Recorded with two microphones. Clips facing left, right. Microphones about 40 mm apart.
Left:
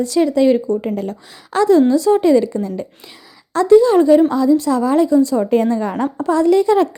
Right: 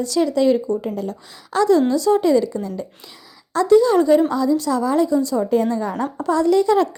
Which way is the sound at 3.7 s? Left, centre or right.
Left.